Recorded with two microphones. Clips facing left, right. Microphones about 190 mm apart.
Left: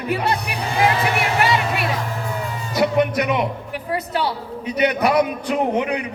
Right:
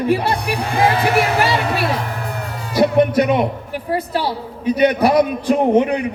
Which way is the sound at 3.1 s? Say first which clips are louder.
Right 5 dB; 30° right (ahead or behind).